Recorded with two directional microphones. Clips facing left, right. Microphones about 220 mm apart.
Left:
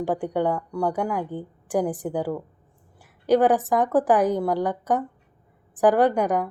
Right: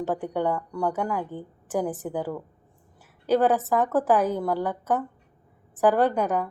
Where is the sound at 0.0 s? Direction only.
15° left (ahead or behind).